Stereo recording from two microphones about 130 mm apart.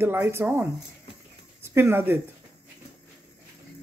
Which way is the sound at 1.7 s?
20° right (ahead or behind).